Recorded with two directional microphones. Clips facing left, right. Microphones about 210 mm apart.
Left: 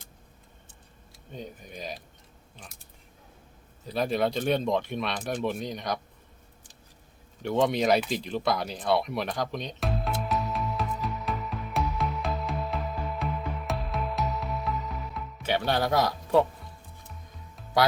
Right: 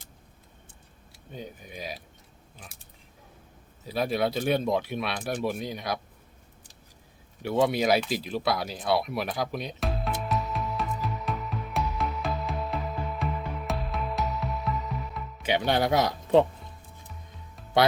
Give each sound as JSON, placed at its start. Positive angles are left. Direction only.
{"t": 1.3, "sound": "speech", "side_deg": -5}
{"t": 3.8, "sound": "speech", "side_deg": -5}
{"t": 7.4, "sound": "speech", "side_deg": -5}
{"t": 8.1, "sound": "music", "side_deg": -5}
{"t": 15.4, "sound": "speech", "side_deg": -15}